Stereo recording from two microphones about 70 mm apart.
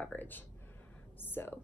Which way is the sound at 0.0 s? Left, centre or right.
Left.